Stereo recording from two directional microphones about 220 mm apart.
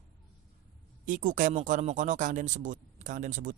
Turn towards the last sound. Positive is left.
turn(degrees=-35)  # may be behind; listen again after turning